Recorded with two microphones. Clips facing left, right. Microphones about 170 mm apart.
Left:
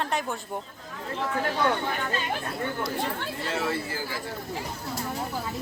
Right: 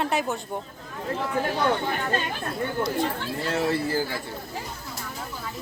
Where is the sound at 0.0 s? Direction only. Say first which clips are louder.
Right 3 dB; 5° right (ahead or behind).